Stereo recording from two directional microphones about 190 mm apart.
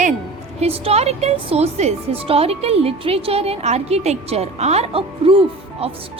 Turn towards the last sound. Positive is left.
turn(degrees=-30)  # may be behind; listen again after turning